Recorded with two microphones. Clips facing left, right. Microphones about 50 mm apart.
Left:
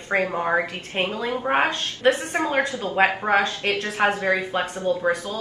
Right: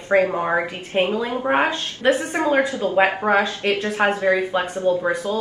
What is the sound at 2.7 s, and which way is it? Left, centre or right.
Speech, right.